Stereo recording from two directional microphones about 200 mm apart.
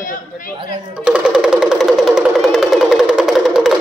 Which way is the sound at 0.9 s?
5° right (ahead or behind).